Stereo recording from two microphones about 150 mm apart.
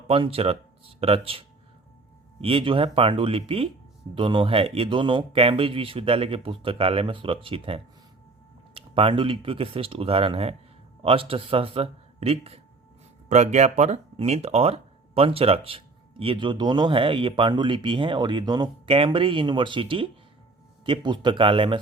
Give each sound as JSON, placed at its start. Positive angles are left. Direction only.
{"t": 0.1, "sound": "speech", "side_deg": -40}